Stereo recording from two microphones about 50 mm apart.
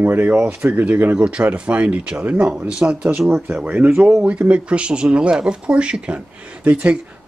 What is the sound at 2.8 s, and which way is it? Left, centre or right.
Speech, centre.